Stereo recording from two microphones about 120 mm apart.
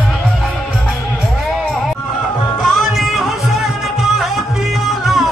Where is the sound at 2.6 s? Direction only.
Centre (ahead or behind).